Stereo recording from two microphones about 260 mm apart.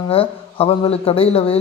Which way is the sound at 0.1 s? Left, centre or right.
Left.